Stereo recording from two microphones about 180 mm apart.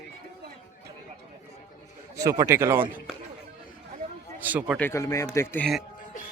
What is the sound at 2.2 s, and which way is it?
Speech, 15° right (ahead or behind).